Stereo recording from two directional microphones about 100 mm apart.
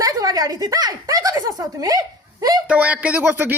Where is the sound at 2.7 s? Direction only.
15° right (ahead or behind).